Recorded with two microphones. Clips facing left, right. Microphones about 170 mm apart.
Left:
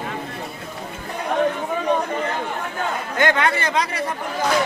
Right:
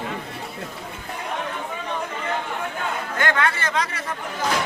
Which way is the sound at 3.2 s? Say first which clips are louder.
Left 4 dB; 20° left (ahead or behind).